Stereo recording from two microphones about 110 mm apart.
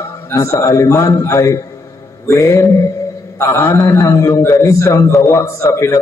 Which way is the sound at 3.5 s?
25° left (ahead or behind).